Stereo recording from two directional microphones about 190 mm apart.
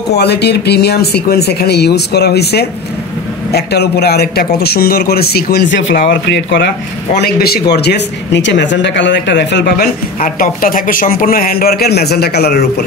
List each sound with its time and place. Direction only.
0.1 s speech: 60° left (ahead or behind)
7.2 s speech: 55° left (ahead or behind)
10.2 s speech: 45° left (ahead or behind)